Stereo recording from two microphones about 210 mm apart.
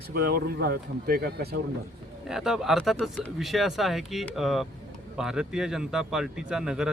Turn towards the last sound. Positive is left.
turn(degrees=-5)  # may be behind; listen again after turning